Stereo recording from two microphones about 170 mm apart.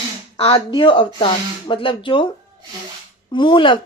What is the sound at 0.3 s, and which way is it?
Speech, 35° left (ahead or behind).